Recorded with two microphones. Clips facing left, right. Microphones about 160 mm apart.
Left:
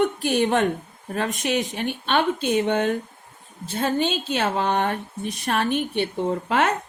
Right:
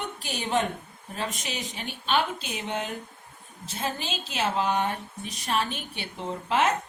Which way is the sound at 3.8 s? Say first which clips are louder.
Left 9 dB; centre (ahead or behind).